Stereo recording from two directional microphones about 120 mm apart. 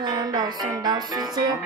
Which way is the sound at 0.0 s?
35° right (ahead or behind).